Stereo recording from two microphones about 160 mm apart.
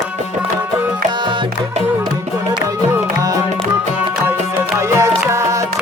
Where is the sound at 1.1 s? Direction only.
30° right (ahead or behind).